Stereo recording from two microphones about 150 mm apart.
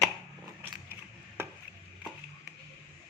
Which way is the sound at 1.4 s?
15° right (ahead or behind).